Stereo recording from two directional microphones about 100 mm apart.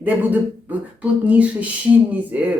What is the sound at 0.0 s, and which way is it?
Speech, 20° right (ahead or behind).